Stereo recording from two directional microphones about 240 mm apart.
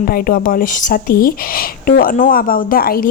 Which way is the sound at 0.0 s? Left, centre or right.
Left.